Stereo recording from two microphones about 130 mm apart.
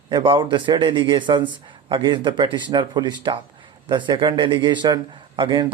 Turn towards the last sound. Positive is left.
turn(degrees=-40)  # may be behind; listen again after turning